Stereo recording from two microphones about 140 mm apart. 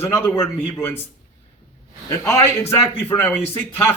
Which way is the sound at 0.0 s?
15° left (ahead or behind).